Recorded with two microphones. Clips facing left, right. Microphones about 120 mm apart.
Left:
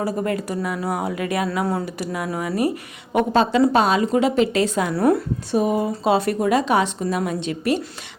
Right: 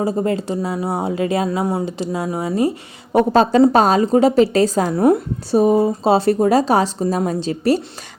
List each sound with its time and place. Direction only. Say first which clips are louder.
0.0 s speech: right 4 dB; 25° right (ahead or behind)
4.9 s speech: right 3 dB; 20° right (ahead or behind)
5.5 s speech: right 6 dB; 35° right (ahead or behind)